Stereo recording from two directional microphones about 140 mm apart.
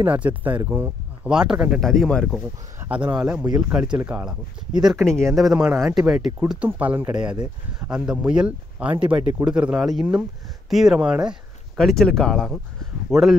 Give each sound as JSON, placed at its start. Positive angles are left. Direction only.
{"t": 0.0, "sound": "speech", "side_deg": -10}
{"t": 1.9, "sound": "speech", "side_deg": 5}
{"t": 2.8, "sound": "speech", "side_deg": -10}
{"t": 4.8, "sound": "speech", "side_deg": 5}